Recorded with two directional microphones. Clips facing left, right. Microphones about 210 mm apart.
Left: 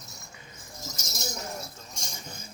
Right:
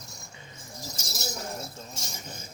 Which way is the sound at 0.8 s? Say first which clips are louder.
Even; 30° right (ahead or behind).